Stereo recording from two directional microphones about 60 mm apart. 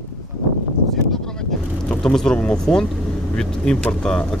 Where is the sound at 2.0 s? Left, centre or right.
Centre.